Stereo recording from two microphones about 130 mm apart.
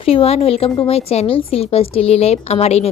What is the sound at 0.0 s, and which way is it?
Speech, 50° left (ahead or behind).